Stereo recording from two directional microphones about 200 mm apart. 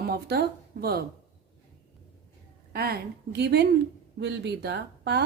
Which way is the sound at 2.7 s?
50° right (ahead or behind).